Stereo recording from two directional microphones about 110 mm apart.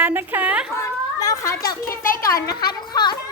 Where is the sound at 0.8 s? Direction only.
30° left (ahead or behind).